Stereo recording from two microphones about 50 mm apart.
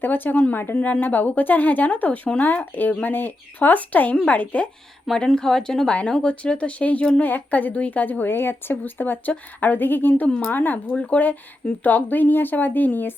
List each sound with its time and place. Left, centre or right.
0.0 s speech: left
0.5 s a woman's voice: left
0.8 s speech: left
5.1 s speech: centre
5.9 s speech: left
8.8 s speech: left
10.2 s speech: left
10.5 s speech: left
10.9 s speech: left
11.8 s speech: left